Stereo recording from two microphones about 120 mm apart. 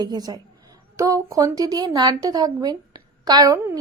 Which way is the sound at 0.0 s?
35° right (ahead or behind).